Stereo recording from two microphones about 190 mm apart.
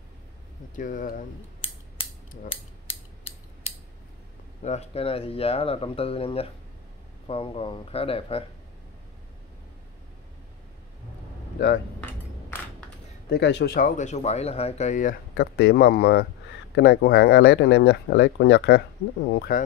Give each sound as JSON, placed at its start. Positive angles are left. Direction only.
{"t": 0.7, "sound": "speech", "side_deg": 45}
{"t": 1.6, "sound": "mechanisms", "side_deg": 30}
{"t": 4.6, "sound": "speech", "side_deg": 30}
{"t": 12.0, "sound": "cutlery", "side_deg": 10}
{"t": 13.3, "sound": "speech", "side_deg": 65}
{"t": 19.3, "sound": "speech", "side_deg": 55}